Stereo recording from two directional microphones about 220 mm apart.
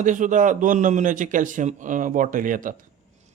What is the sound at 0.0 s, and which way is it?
Speech, 35° right (ahead or behind).